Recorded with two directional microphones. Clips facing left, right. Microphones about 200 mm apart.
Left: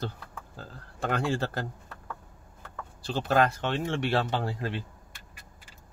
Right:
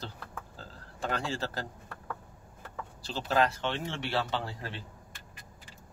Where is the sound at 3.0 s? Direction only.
55° left (ahead or behind).